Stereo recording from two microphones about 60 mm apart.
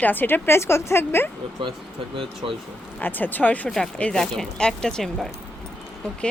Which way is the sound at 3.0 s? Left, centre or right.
Left.